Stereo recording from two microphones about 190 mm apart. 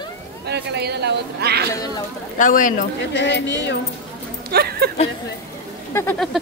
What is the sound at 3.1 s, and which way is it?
Speech, 70° left (ahead or behind).